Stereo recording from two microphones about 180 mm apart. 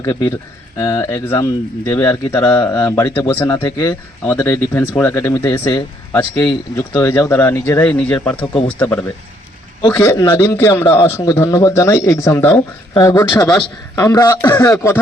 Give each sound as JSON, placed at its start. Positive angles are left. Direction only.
{"t": 0.0, "sound": "speech", "side_deg": 20}
{"t": 8.4, "sound": "speech", "side_deg": 30}
{"t": 8.8, "sound": "speech", "side_deg": 10}